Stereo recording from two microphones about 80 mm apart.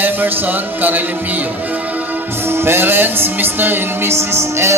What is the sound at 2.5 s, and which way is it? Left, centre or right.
Music, right.